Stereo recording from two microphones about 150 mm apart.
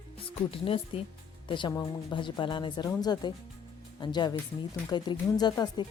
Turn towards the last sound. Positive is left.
turn(degrees=25)  # may be behind; listen again after turning